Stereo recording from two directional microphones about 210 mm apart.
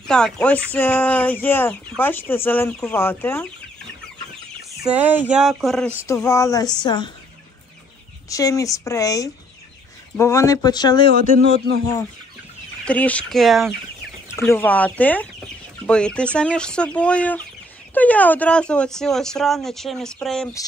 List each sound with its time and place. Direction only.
0.0 s speech: 5° left (ahead or behind)
4.8 s speech: 10° right (ahead or behind)
6.0 s speech: 15° left (ahead or behind)
8.3 s speech: 15° left (ahead or behind)
11.1 s speech: 45° right (ahead or behind)
12.8 s speech: 5° left (ahead or behind)
14.3 s speech: 10° left (ahead or behind)